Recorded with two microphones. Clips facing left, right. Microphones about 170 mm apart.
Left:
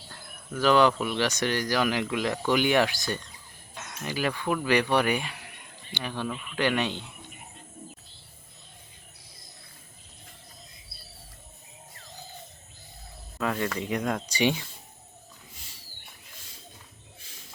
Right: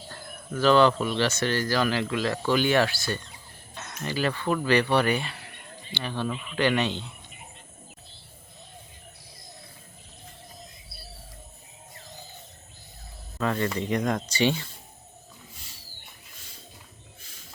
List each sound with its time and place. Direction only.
0.1 s speech: 10° left (ahead or behind)
13.4 s speech: 5° left (ahead or behind)